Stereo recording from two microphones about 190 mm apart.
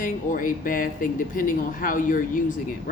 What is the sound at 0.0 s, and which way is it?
Speech, 45° left (ahead or behind).